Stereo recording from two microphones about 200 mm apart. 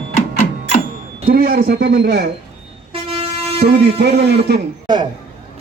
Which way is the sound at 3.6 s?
55° right (ahead or behind).